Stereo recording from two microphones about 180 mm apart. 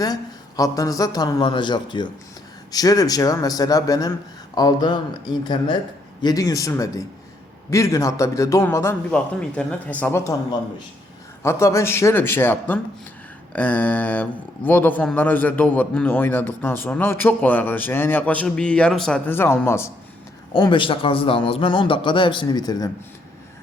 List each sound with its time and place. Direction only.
0.0 s a man's voice: 20° left (ahead or behind)
6.2 s a man's voice: 20° left (ahead or behind)
20.5 s a man's voice: 25° left (ahead or behind)